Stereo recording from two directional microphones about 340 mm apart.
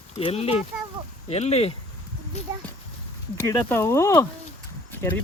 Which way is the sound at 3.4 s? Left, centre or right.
Centre.